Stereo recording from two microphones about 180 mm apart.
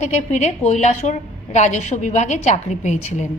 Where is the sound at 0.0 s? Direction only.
40° left (ahead or behind).